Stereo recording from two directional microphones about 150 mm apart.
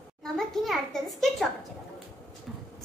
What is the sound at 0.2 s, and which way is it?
A child's voice, centre (ahead or behind).